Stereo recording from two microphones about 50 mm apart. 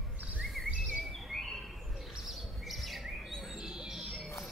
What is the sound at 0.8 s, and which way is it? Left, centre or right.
Bird, right.